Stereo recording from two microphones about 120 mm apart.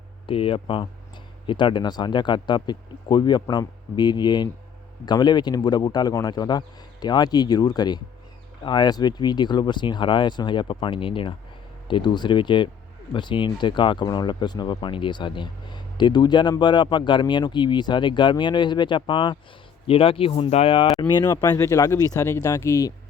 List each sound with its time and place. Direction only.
0.3 s speech: 50° left (ahead or behind)
20.7 s speech: 40° left (ahead or behind)